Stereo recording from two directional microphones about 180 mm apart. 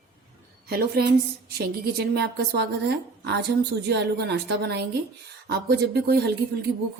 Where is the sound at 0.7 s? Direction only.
60° right (ahead or behind).